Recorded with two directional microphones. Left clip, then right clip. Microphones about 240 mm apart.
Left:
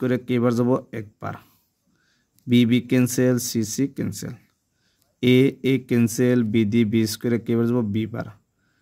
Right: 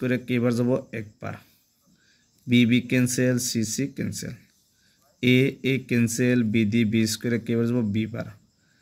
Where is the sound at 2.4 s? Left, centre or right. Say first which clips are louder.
Left 2 dB; left.